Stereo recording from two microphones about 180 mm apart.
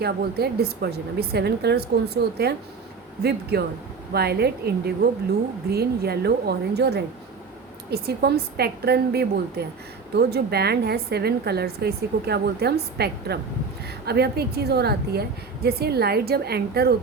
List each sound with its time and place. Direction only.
0.0 s a woman's voice: 60° right (ahead or behind)